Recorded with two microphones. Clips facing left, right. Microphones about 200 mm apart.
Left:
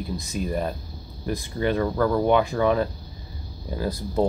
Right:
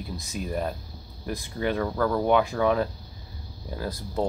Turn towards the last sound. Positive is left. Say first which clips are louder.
# left 5 dB
turn(degrees=5)  # may be behind; listen again after turning